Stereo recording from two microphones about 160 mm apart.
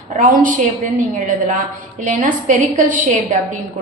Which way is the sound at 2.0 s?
55° right (ahead or behind).